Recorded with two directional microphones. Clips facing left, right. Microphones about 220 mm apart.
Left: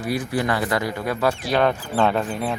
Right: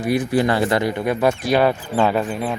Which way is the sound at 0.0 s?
20° right (ahead or behind).